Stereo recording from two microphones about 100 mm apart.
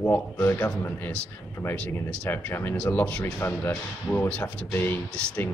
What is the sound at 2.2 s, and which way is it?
Speech, 20° left (ahead or behind).